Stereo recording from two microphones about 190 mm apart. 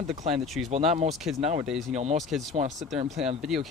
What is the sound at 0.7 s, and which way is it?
Speech, 35° right (ahead or behind).